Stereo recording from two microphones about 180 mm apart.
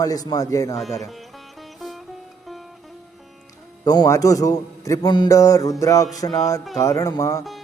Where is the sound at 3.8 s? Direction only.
20° left (ahead or behind).